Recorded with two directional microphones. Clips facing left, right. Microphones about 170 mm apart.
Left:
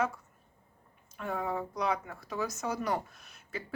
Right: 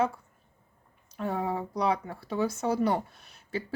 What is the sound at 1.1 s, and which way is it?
Speech, 35° right (ahead or behind).